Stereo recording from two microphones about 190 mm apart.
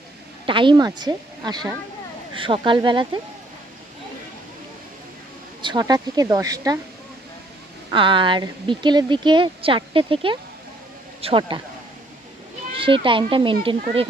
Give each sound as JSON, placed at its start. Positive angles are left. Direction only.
{"t": 0.4, "sound": "speech", "side_deg": -25}
{"t": 5.6, "sound": "speech", "side_deg": -20}
{"t": 7.9, "sound": "speech", "side_deg": -25}
{"t": 12.7, "sound": "speech", "side_deg": -25}